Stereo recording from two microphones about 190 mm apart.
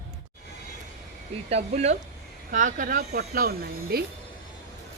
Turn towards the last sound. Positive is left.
turn(degrees=-55)  # may be behind; listen again after turning